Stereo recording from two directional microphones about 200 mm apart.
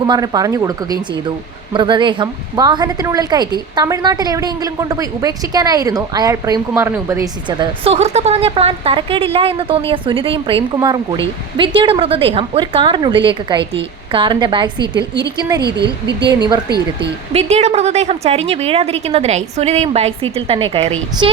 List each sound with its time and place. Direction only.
0.0 s a woman's voice: 20° right (ahead or behind)
15.6 s a woman's voice: 60° right (ahead or behind)
17.0 s speech: 30° right (ahead or behind)